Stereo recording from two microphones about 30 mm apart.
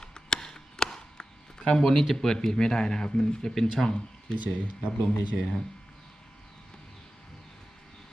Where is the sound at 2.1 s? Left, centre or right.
Centre.